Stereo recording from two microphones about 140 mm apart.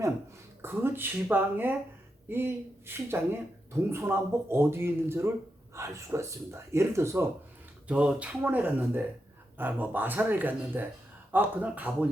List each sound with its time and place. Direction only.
0.6 s speech: 15° right (ahead or behind)
7.9 s speech: 10° right (ahead or behind)